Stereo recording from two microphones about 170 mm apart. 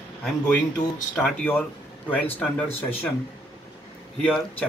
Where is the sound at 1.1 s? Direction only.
5° left (ahead or behind).